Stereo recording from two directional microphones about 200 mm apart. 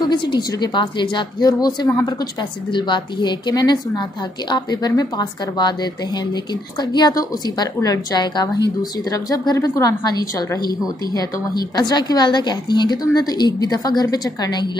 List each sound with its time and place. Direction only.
0.0 s a woman's voice: 20° left (ahead or behind)
11.7 s a woman's voice: 20° left (ahead or behind)